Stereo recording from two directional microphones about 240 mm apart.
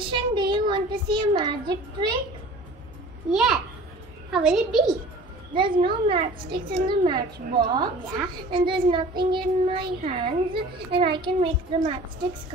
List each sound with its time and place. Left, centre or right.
0.0 s a child's voice: centre
3.3 s a woman's voice: centre
5.5 s a child's voice: centre